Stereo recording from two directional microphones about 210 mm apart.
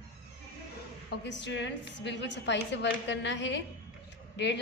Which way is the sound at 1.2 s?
55° left (ahead or behind).